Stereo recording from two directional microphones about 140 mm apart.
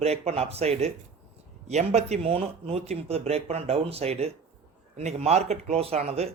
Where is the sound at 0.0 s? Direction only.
50° right (ahead or behind).